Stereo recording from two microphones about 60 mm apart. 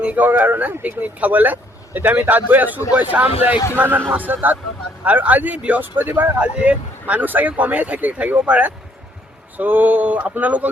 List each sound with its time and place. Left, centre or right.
0.0 s speech: right